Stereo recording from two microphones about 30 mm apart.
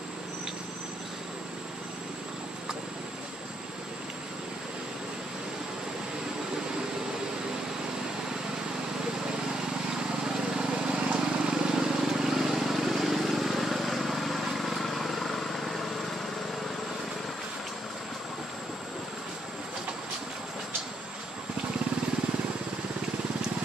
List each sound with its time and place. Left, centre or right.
10.2 s vehicle: right
10.7 s vehicle: right; by 16.2 s centre